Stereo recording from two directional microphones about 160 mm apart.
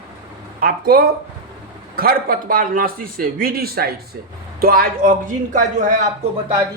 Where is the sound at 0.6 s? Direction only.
65° right (ahead or behind).